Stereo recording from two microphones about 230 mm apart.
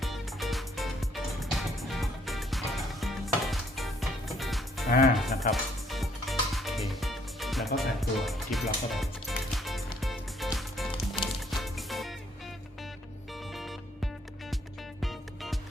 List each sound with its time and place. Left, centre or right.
0.0 s music: centre
7.8 s speech: centre
10.0 s music: centre
13.5 s music: centre